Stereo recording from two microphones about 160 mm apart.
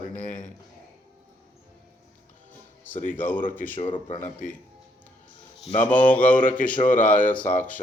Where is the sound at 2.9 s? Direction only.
55° left (ahead or behind).